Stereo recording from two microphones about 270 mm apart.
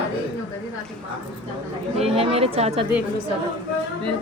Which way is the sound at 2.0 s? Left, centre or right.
Right.